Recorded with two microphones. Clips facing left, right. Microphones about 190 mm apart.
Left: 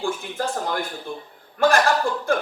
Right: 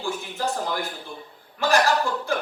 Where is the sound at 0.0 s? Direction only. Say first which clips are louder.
Left 2 dB; 50° left (ahead or behind).